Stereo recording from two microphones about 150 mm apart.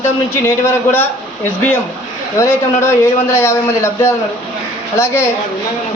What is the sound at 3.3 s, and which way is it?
A man's voice, 15° left (ahead or behind).